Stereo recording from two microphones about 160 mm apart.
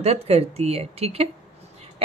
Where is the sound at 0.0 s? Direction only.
40° right (ahead or behind).